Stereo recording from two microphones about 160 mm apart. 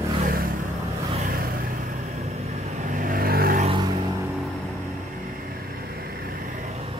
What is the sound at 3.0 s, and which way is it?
Vehicle, 65° right (ahead or behind).